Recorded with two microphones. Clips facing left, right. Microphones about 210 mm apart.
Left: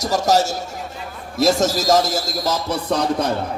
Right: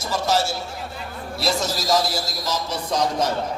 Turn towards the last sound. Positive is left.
turn(degrees=60)  # may be behind; listen again after turning